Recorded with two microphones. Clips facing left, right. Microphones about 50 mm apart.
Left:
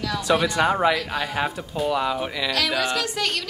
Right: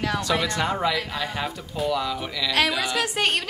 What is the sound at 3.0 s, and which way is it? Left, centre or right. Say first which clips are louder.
Speech: right 2 dB; right.